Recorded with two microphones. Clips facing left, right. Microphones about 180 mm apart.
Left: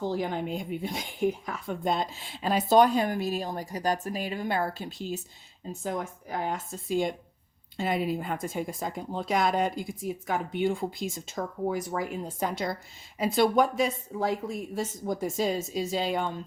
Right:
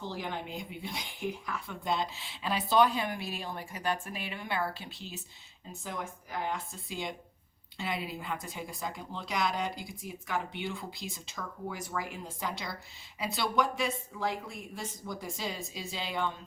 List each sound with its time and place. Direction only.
0.0 s speech: 45° left (ahead or behind)